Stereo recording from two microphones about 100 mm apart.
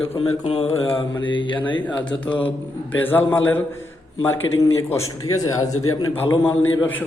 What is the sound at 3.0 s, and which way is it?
Speech, 20° left (ahead or behind).